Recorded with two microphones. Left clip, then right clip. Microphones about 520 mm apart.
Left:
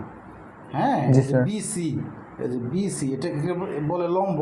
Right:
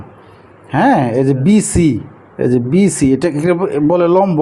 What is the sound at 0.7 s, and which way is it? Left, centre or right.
Speech, right.